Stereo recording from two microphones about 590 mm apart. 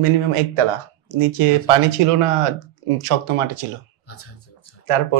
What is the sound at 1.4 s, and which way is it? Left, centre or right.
Speech, right.